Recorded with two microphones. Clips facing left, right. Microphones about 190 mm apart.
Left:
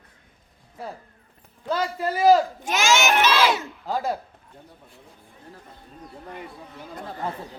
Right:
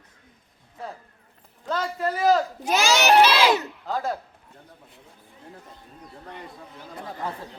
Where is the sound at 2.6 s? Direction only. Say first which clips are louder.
Right 4 dB; 35° right (ahead or behind).